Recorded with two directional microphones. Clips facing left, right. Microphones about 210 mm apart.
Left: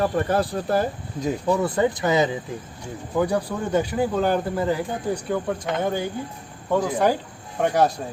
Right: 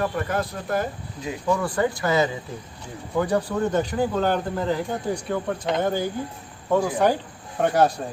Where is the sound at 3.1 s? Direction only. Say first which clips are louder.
Even; 10° left (ahead or behind).